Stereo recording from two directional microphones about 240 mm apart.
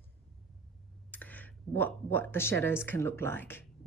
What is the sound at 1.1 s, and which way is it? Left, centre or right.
Speech, centre.